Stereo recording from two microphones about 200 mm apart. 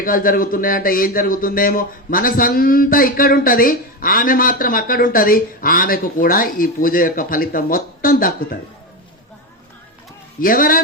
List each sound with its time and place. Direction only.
0.0 s speech: 45° left (ahead or behind)
10.4 s speech: 45° left (ahead or behind)